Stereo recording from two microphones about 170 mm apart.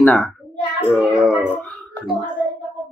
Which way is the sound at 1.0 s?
5° right (ahead or behind).